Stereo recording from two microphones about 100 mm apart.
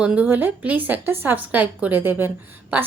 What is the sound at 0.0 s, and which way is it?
A woman's voice, 10° right (ahead or behind).